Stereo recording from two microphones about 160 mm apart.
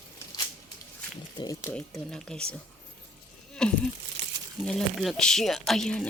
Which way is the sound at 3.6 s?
5° left (ahead or behind).